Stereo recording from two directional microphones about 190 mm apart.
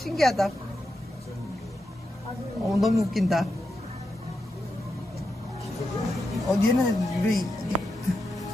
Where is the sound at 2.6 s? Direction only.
Centre (ahead or behind).